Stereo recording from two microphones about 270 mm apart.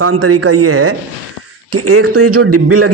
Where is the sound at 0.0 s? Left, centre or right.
Right.